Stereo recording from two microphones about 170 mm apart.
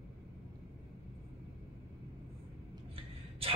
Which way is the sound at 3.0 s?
35° right (ahead or behind).